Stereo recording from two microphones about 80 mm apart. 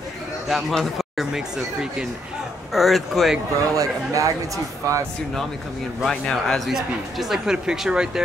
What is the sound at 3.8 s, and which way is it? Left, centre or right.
Speech, right.